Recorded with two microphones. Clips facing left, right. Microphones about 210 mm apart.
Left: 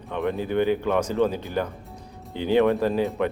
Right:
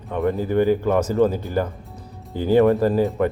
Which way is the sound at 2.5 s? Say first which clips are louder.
Right 4 dB; centre (ahead or behind).